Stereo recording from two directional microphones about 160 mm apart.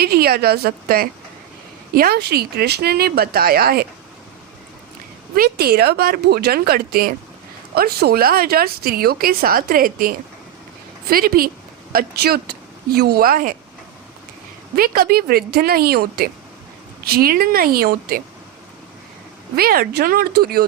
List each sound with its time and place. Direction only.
0.0 s speech: 75° right (ahead or behind)
5.4 s a woman's voice: 75° right (ahead or behind)
14.8 s speech: 70° right (ahead or behind)
19.5 s speech: 70° right (ahead or behind)